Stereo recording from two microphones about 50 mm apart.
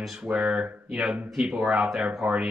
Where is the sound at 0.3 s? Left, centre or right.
Right.